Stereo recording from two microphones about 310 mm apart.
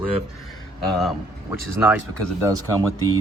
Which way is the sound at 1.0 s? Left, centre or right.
Centre.